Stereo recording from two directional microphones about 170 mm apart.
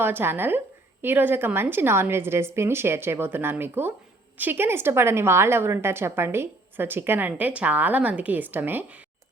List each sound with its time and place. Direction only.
0.0 s a woman's voice: 10° right (ahead or behind)